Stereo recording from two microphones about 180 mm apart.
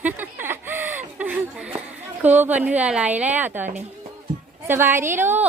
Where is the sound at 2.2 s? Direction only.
10° right (ahead or behind).